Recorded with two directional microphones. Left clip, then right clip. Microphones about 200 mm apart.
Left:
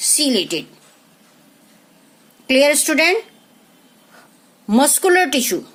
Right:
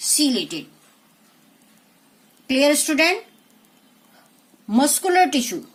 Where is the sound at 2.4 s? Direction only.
40° left (ahead or behind).